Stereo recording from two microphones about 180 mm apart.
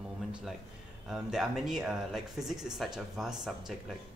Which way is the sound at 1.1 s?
5° right (ahead or behind).